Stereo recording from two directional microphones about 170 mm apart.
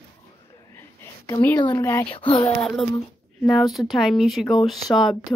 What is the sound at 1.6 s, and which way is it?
Speech, 25° left (ahead or behind).